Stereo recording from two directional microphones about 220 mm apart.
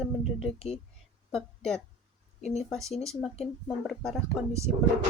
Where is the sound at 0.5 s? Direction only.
30° left (ahead or behind).